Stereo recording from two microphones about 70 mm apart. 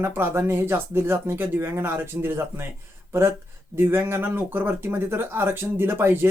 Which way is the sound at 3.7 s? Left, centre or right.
Right.